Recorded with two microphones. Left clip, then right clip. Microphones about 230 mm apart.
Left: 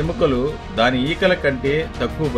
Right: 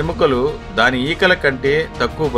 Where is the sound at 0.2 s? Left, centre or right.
Right.